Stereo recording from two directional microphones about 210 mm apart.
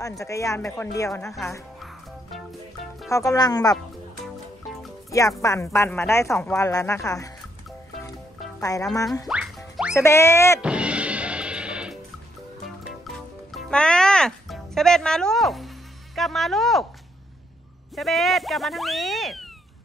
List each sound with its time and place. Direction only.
0.2 s speech: 15° left (ahead or behind)
1.8 s music: centre (ahead or behind)
3.1 s speech: 15° left (ahead or behind)
5.4 s speech: 15° left (ahead or behind)
8.5 s speech: 15° left (ahead or behind)
9.3 s music: centre (ahead or behind)
9.9 s speech: 10° left (ahead or behind)
10.6 s music: 5° right (ahead or behind)
13.5 s music: centre (ahead or behind)
16.2 s speech: centre (ahead or behind)
17.9 s speech: centre (ahead or behind)